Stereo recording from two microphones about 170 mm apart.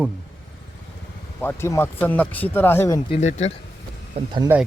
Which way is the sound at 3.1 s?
40° left (ahead or behind).